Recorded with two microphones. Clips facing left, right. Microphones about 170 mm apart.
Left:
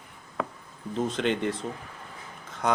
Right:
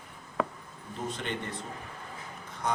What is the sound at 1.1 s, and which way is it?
Speech, 90° left.